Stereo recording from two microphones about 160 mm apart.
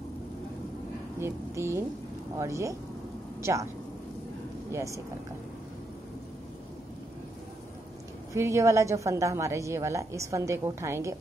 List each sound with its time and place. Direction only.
1.2 s a woman's voice: 15° right (ahead or behind)
4.6 s a woman's voice: 20° right (ahead or behind)
8.3 s a woman's voice: 20° right (ahead or behind)